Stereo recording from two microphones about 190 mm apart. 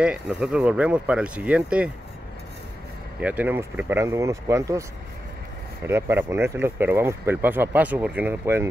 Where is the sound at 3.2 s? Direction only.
10° right (ahead or behind).